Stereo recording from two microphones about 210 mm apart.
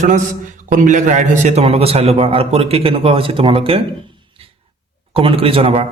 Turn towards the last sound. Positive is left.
turn(degrees=-30)  # may be behind; listen again after turning